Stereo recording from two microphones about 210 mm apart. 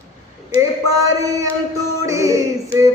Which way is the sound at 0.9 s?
15° right (ahead or behind).